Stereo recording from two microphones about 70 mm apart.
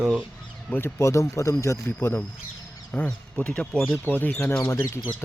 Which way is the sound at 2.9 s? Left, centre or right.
Left.